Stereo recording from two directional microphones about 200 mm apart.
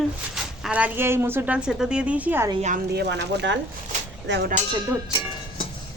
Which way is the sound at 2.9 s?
55° right (ahead or behind).